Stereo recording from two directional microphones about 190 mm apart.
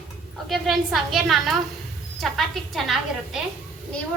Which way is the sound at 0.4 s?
Centre (ahead or behind).